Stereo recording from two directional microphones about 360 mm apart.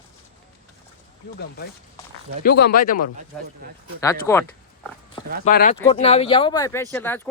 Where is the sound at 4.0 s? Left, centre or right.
Centre.